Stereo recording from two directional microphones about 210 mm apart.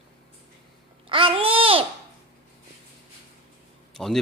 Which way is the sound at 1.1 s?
25° right (ahead or behind).